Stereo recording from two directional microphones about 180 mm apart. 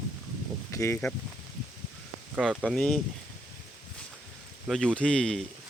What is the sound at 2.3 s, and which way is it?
Speech, centre (ahead or behind).